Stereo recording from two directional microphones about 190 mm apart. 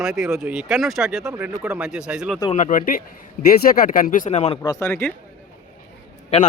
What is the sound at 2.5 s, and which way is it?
Speech, 40° left (ahead or behind).